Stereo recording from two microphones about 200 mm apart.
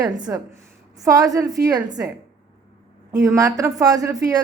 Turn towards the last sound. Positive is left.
turn(degrees=-15)  # may be behind; listen again after turning